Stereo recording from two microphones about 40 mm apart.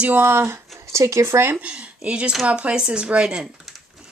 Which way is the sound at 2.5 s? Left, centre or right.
Right.